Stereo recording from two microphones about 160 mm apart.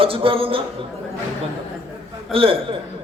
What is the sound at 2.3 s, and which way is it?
Speech, 35° right (ahead or behind).